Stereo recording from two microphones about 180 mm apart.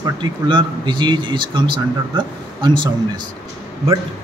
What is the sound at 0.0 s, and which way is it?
A man's voice, 25° right (ahead or behind).